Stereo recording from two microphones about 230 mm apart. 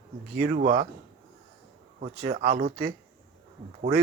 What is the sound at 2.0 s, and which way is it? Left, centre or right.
Speech, right.